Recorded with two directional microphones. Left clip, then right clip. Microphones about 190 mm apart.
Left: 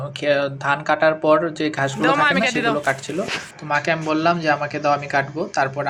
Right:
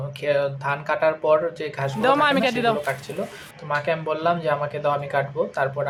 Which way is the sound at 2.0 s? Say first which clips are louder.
Left 1 dB; 10° left (ahead or behind).